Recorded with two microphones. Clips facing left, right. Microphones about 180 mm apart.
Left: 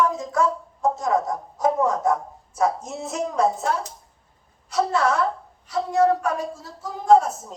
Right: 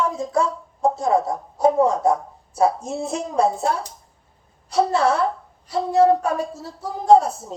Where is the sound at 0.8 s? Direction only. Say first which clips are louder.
Right 3 dB; 30° right (ahead or behind).